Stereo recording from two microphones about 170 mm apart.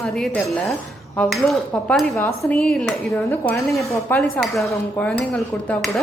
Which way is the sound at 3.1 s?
15° left (ahead or behind).